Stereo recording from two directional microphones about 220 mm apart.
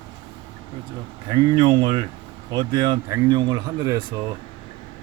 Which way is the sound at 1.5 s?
20° right (ahead or behind).